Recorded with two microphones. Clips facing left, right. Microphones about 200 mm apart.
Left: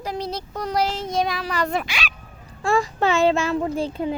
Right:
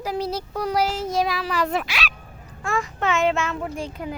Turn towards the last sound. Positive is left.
turn(degrees=30)  # may be behind; listen again after turning